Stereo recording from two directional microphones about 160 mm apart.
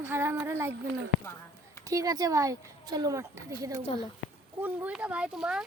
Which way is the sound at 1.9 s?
20° right (ahead or behind).